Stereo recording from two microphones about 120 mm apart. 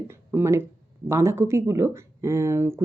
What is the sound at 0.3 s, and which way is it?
Speech, 20° right (ahead or behind).